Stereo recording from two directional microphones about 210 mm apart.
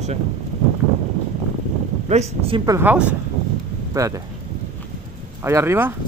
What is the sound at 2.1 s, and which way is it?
Speech, 30° right (ahead or behind).